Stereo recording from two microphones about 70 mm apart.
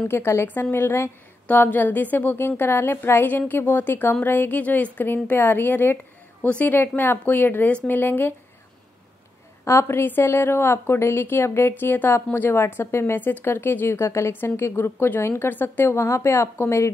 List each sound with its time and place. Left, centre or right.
0.1 s a woman's voice: left
1.5 s a woman's voice: left
9.7 s a woman's voice: left